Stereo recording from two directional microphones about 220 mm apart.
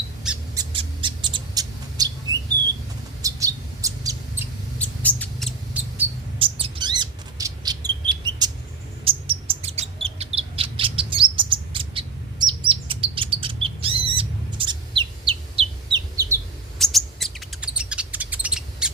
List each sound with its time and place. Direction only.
0.5 s bird: 20° right (ahead or behind)
3.2 s bird: 15° right (ahead or behind)
4.8 s rodents: 5° left (ahead or behind)
6.4 s bird: 20° right (ahead or behind)
16.7 s chirp: centre (ahead or behind)